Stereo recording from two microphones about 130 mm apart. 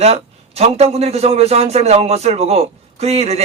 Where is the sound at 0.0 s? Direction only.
55° right (ahead or behind).